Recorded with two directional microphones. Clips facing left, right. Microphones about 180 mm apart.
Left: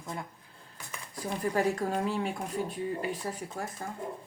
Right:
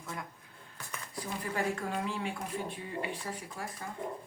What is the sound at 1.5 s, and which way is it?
Speech, 40° left (ahead or behind).